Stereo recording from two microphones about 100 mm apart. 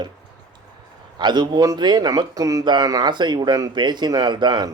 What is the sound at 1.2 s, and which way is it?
A man's voice, 50° right (ahead or behind).